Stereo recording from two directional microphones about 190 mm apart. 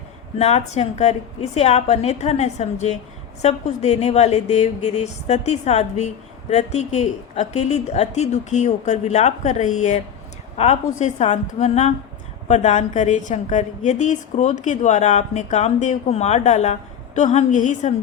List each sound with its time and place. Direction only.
0.3 s a woman's voice: 35° left (ahead or behind)